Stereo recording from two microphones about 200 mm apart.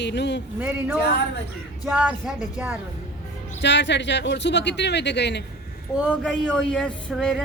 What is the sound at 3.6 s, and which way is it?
A woman's voice, 60° left (ahead or behind).